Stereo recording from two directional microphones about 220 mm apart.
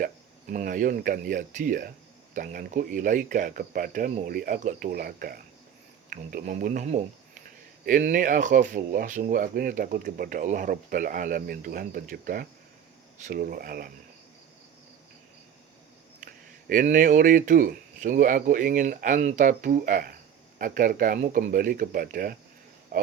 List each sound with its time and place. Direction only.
0.0 s speech: 40° right (ahead or behind)
16.2 s speech: 40° right (ahead or behind)